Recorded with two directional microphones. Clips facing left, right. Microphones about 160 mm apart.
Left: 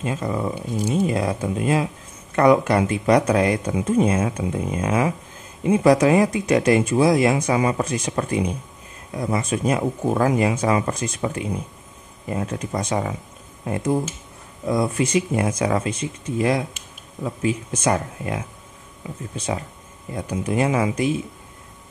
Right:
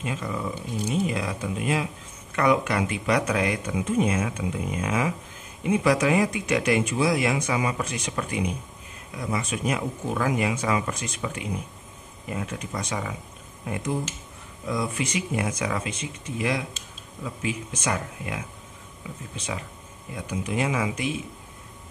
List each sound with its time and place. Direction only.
0.0 s speech: 40° left (ahead or behind)
14.7 s speech: 40° left (ahead or behind)